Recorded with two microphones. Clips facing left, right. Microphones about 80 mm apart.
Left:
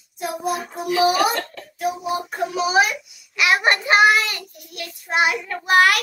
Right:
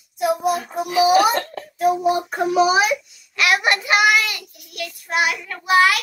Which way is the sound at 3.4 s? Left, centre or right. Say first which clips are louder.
Even; left.